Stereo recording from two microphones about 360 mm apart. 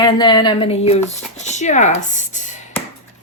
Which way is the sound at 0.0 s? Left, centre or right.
Centre.